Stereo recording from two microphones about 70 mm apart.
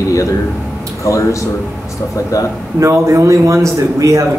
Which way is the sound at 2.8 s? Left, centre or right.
Right.